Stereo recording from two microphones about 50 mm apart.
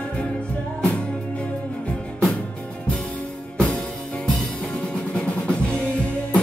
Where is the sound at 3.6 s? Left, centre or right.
Centre.